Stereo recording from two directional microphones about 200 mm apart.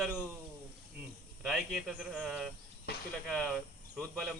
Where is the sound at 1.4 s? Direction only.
Centre (ahead or behind).